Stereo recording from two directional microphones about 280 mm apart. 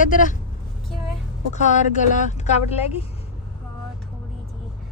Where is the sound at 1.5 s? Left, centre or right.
Left.